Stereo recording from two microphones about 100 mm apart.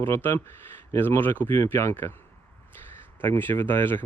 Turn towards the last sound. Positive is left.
turn(degrees=20)  # may be behind; listen again after turning